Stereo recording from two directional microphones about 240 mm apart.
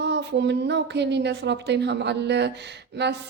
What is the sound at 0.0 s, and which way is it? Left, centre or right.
A woman's voice, right.